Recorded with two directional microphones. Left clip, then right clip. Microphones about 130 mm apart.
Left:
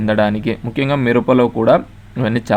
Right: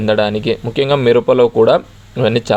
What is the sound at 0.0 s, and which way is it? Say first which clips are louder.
Speech: right 2 dB; 25° right (ahead or behind).